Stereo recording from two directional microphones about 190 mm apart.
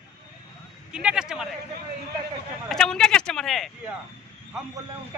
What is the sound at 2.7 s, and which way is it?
Speech, 5° left (ahead or behind).